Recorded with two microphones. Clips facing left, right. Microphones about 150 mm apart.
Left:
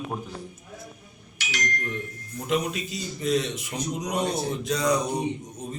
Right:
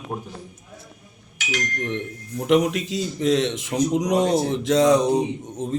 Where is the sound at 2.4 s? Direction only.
90° right.